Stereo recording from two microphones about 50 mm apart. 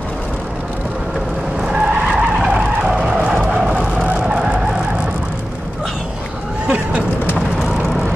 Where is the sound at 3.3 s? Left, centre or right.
Centre.